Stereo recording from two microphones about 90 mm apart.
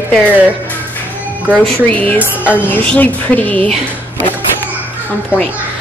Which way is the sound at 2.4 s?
15° right (ahead or behind).